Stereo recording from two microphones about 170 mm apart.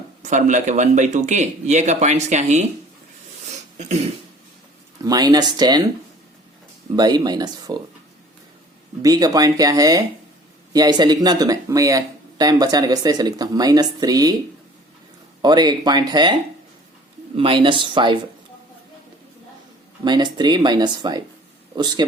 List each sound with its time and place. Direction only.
0.2 s speech: 45° right (ahead or behind)
3.4 s a sound: 45° right (ahead or behind)
5.0 s speech: 25° right (ahead or behind)
6.9 s speech: 25° right (ahead or behind)
9.0 s speech: 20° right (ahead or behind)
15.4 s speech: 25° right (ahead or behind)
17.3 s speech: 30° right (ahead or behind)
20.1 s speech: 25° right (ahead or behind)